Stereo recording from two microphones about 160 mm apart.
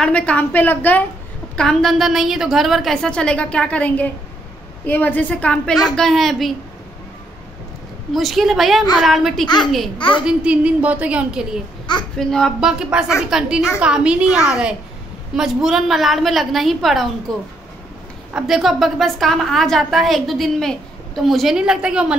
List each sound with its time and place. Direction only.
0.0 s a woman's voice: 5° left (ahead or behind)
8.1 s a woman's voice: centre (ahead or behind)
9.9 s a child's voice: 30° left (ahead or behind)
10.2 s a woman's voice: 5° right (ahead or behind)
18.3 s a woman's voice: centre (ahead or behind)